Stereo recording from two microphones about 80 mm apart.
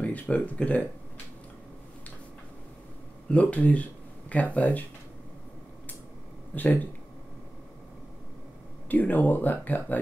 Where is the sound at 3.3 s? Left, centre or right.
Centre.